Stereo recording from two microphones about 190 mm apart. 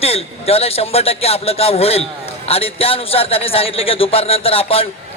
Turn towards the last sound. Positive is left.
turn(degrees=30)  # may be behind; listen again after turning